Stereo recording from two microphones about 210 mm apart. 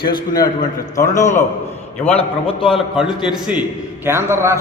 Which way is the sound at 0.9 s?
15° left (ahead or behind).